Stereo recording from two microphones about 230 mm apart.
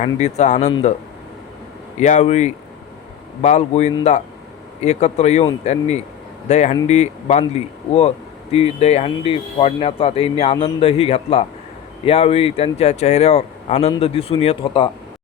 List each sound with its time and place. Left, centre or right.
0.2 s speech: left
2.0 s speech: left
6.5 s speech: left